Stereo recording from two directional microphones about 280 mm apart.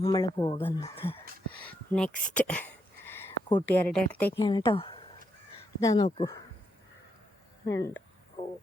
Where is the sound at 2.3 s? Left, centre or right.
Centre.